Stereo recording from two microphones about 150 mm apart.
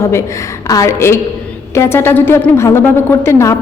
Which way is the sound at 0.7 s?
20° left (ahead or behind).